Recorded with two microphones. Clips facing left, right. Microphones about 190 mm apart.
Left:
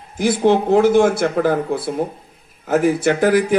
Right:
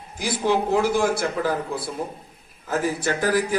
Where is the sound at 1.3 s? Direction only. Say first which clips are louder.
Left 7 dB; 55° left (ahead or behind).